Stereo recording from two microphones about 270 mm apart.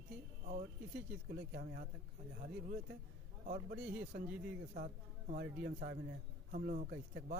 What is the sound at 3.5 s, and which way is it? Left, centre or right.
A man's voice, right.